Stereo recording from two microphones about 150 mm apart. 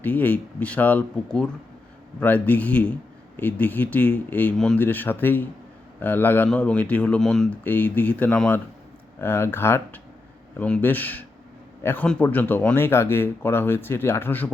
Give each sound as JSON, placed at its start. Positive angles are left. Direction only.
{"t": 0.0, "sound": "speech", "side_deg": 10}